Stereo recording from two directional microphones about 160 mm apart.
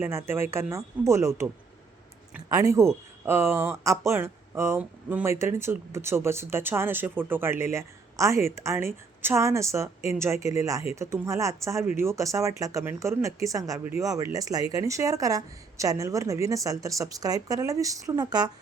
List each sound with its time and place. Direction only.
0.0 s speech: 15° right (ahead or behind)
2.5 s speech: 20° right (ahead or behind)